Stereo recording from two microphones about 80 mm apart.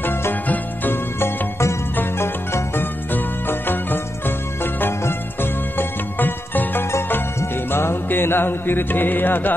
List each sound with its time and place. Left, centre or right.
0.0 s music: left